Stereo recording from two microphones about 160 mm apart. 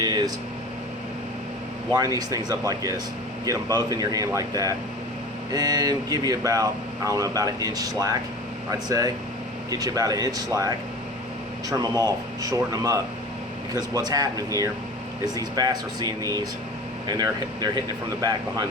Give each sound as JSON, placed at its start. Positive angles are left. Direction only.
{"t": 0.0, "sound": "air conditioning", "side_deg": -25}
{"t": 2.1, "sound": "speech", "side_deg": -20}